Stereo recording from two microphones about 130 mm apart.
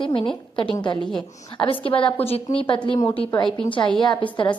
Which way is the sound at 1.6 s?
40° left (ahead or behind).